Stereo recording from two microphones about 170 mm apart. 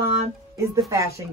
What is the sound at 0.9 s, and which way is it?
Speech, 20° right (ahead or behind).